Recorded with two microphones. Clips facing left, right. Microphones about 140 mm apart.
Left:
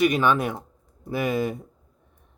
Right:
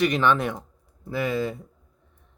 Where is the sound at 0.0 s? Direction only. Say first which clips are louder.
Left 1 dB; 10° left (ahead or behind).